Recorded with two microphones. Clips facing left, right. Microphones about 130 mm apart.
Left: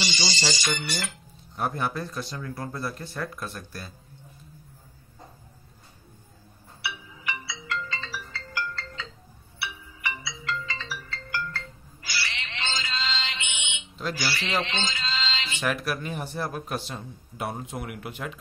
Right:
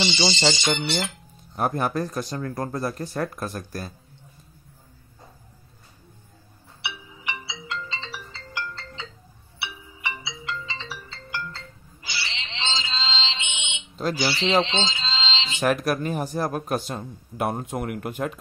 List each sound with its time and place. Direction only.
0.0 s speech: 20° right (ahead or behind)
1.6 s speech: 45° right (ahead or behind)
6.8 s music: 20° right (ahead or behind)
14.1 s a man's voice: 20° right (ahead or behind)
15.6 s speech: 45° right (ahead or behind)